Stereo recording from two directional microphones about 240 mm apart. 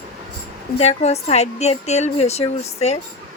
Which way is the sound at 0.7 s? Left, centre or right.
Left.